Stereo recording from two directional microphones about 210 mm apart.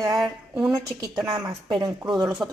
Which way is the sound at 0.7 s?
15° right (ahead or behind).